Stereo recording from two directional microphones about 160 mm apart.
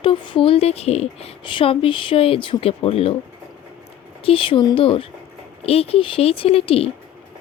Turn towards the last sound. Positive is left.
turn(degrees=40)  # may be behind; listen again after turning